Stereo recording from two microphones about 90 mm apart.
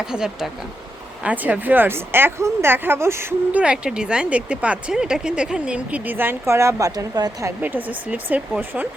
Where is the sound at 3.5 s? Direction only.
10° right (ahead or behind); by 7.5 s 40° right (ahead or behind).